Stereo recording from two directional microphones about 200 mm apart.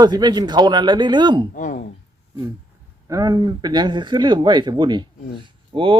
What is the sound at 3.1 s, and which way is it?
Speech, 20° right (ahead or behind).